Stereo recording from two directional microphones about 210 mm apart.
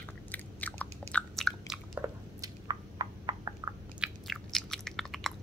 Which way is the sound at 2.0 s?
20° right (ahead or behind).